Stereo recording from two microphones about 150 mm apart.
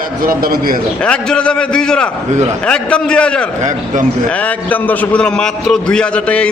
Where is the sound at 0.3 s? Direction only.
70° right (ahead or behind).